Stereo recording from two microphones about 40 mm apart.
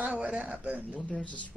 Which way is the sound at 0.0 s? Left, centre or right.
Right.